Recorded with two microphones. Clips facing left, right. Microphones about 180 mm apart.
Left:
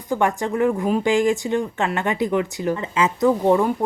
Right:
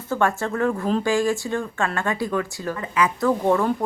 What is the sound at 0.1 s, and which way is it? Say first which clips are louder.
Speech: left 2 dB; 15° left (ahead or behind).